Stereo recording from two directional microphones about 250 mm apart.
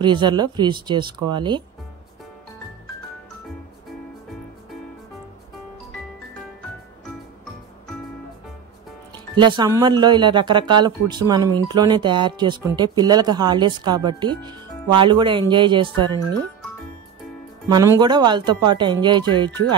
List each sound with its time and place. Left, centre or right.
0.0 s speech: centre
9.3 s speech: centre
17.6 s speech: centre